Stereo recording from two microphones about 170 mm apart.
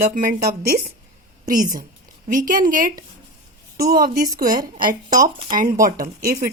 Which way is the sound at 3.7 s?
65° right (ahead or behind).